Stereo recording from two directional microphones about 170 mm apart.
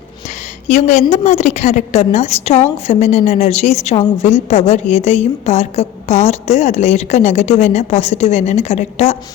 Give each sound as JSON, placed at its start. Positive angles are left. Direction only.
{"t": 0.7, "sound": "a woman's voice", "side_deg": 40}